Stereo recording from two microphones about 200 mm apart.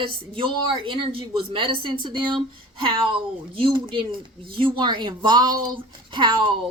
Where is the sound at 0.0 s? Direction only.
25° right (ahead or behind).